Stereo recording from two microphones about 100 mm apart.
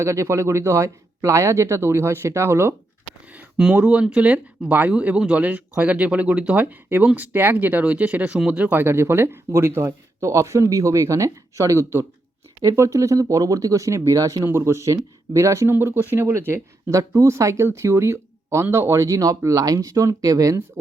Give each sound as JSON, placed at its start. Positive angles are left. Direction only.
{"t": 0.0, "sound": "speech", "side_deg": -30}
{"t": 3.8, "sound": "speech", "side_deg": -15}